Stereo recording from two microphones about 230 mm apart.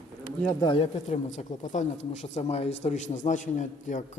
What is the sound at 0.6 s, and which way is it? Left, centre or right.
A man's voice, left.